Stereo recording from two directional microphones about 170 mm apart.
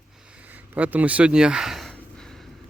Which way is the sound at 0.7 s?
10° right (ahead or behind).